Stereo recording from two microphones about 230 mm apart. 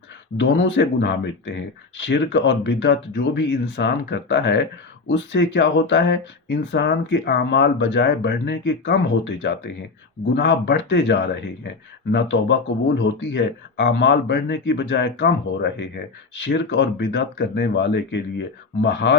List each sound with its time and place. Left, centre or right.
0.3 s speech: left